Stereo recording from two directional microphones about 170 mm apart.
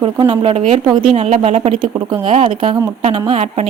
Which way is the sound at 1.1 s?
40° right (ahead or behind).